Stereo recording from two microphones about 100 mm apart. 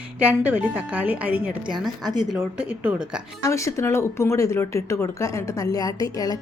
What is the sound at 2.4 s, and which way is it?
Speech, 20° right (ahead or behind).